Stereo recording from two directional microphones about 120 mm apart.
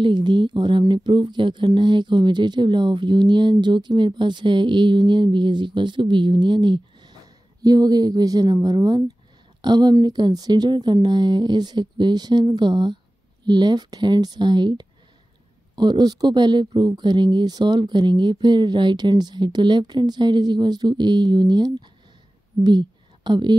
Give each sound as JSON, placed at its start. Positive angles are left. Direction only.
{"t": 0.0, "sound": "a woman's voice", "side_deg": -40}